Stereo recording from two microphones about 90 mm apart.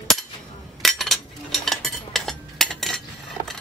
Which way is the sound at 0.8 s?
Centre (ahead or behind).